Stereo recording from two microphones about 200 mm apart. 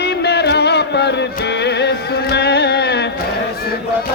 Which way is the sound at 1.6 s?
55° left (ahead or behind).